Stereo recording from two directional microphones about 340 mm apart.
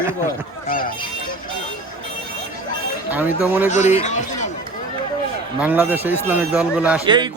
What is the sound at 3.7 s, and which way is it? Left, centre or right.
Speech, left.